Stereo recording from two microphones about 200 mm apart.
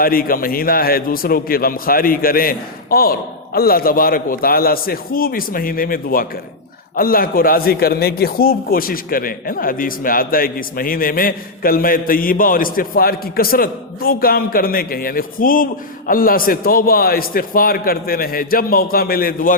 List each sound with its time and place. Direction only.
0.0 s a man's voice: 45° left (ahead or behind)